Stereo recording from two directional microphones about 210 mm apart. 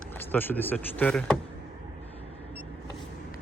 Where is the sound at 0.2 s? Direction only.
10° left (ahead or behind).